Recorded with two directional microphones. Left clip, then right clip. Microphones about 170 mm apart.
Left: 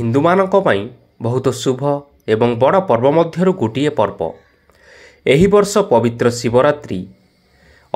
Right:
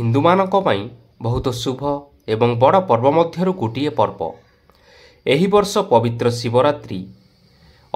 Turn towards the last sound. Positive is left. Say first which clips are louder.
# left 3 dB
turn(degrees=20)  # may be behind; listen again after turning